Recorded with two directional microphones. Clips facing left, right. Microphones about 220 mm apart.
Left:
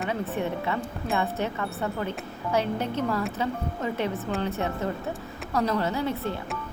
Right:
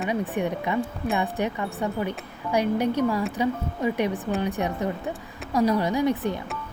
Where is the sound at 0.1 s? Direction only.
15° right (ahead or behind).